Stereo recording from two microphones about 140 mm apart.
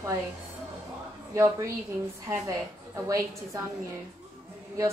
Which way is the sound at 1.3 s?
20° right (ahead or behind).